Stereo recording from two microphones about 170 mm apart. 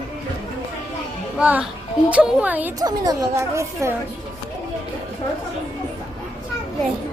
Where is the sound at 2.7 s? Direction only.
20° right (ahead or behind).